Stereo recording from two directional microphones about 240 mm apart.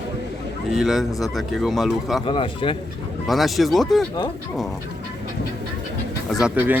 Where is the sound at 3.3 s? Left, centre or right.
Centre.